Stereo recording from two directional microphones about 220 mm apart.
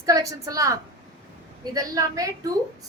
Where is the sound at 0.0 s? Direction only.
15° right (ahead or behind).